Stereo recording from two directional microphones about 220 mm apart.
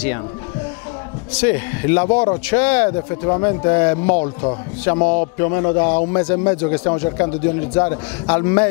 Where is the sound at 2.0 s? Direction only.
25° left (ahead or behind).